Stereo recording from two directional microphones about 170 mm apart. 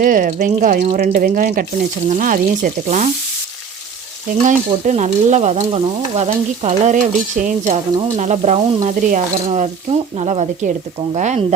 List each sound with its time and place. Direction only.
0.0 s speech: 55° right (ahead or behind)
2.0 s stir: 50° right (ahead or behind)
4.4 s stir: 45° right (ahead or behind)
10.2 s stir: 40° right (ahead or behind)